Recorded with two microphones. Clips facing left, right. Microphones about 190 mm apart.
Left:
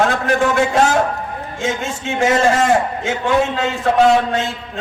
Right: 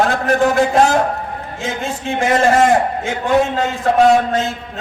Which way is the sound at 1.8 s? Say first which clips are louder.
Right 1 dB; 55° right (ahead or behind).